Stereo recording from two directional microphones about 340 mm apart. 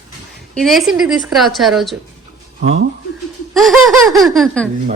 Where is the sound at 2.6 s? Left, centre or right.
Right.